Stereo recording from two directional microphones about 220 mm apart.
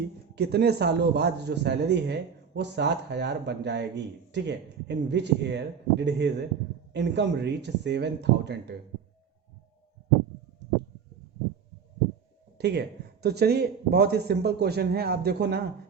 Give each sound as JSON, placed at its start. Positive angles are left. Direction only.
{"t": 0.0, "sound": "a man's voice", "side_deg": -50}
{"t": 12.5, "sound": "a sound", "side_deg": -50}
{"t": 13.2, "sound": "a man's voice", "side_deg": -45}